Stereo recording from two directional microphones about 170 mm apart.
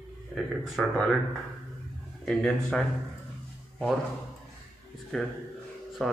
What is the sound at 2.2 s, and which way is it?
Speech, centre (ahead or behind).